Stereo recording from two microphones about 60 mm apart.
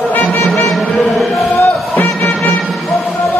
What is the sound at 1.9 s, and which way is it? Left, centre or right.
Music, left.